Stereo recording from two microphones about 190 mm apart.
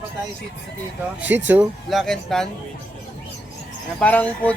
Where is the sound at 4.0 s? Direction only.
5° left (ahead or behind).